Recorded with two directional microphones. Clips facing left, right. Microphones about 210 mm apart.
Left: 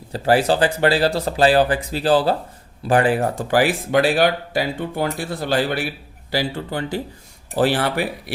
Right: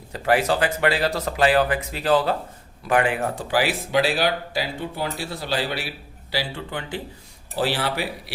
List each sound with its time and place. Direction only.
0.1 s speech: 30° left (ahead or behind)
3.5 s speech: 50° left (ahead or behind)
6.3 s speech: 40° left (ahead or behind)
7.5 s speech: 50° left (ahead or behind)